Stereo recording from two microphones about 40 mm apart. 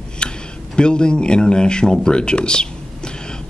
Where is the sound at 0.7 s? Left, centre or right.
Left.